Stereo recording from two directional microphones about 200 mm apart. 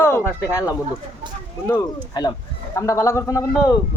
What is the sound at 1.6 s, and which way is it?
Speech, 15° left (ahead or behind).